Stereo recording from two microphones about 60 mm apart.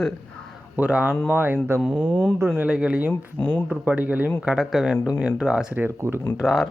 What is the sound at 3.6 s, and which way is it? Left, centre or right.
Speech, right.